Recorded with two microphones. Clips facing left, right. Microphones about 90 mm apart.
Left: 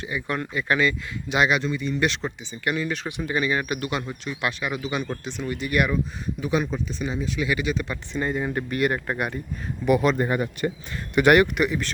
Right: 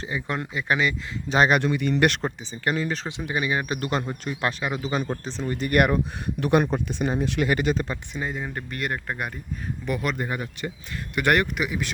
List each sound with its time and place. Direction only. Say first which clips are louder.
0.0 s speech: left 1 dB; 25° right (ahead or behind)
1.3 s speech: right 2 dB; 40° right (ahead or behind)
1.6 s speech: right 3 dB; 65° right (ahead or behind)
2.2 s speech: right 1 dB; 35° right (ahead or behind)
3.2 s speech: left 2 dB; 20° right (ahead or behind)
3.8 s speech: right 2 dB; 40° right (ahead or behind)
8.1 s speech: left 8 dB; centre (ahead or behind); by 10.1 s 15° left (ahead or behind)
10.2 s speech: left 6 dB; 45° left (ahead or behind)
11.3 s speech: left 5 dB; 5° left (ahead or behind)